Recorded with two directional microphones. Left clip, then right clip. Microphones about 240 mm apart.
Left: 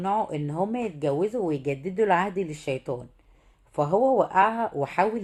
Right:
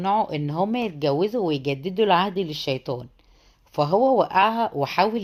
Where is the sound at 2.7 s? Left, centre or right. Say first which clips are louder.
Right 3 dB; right.